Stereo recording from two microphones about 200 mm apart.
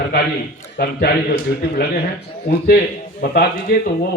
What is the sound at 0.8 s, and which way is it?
A man's voice, 45° left (ahead or behind).